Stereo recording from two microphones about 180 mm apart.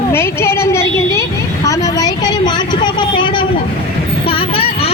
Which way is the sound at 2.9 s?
25° left (ahead or behind).